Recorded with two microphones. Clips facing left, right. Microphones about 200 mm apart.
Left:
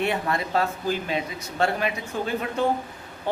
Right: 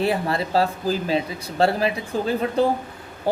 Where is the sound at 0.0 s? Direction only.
30° right (ahead or behind).